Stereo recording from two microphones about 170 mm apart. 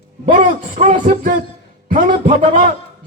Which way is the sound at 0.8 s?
45° right (ahead or behind).